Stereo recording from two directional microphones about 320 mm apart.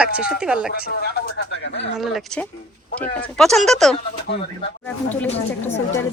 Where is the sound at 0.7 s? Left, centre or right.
Left.